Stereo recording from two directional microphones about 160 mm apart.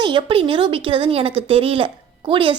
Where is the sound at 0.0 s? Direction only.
30° right (ahead or behind).